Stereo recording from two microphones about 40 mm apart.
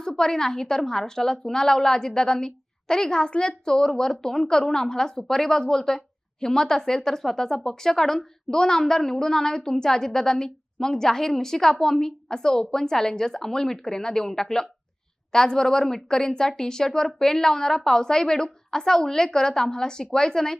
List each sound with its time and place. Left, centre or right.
0.2 s speech: centre